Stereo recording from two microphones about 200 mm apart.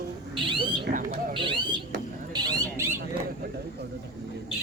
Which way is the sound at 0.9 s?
30° right (ahead or behind).